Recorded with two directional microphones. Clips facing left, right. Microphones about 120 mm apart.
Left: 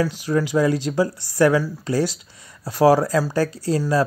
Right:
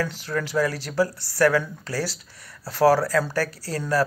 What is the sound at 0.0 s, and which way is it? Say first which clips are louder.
Speech: left 6 dB; 15° left (ahead or behind).